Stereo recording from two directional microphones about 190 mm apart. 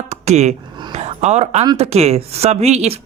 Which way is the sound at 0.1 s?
35° right (ahead or behind).